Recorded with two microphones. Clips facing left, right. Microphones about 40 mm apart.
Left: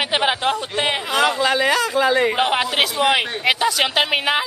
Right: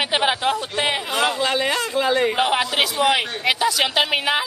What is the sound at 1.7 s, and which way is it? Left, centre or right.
Speech, left.